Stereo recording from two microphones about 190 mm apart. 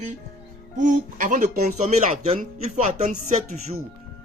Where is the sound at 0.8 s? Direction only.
40° right (ahead or behind).